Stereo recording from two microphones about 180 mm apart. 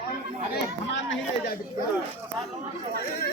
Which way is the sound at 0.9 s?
85° left.